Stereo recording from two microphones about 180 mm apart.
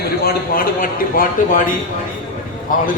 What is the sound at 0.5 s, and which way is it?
Speech, 50° left (ahead or behind).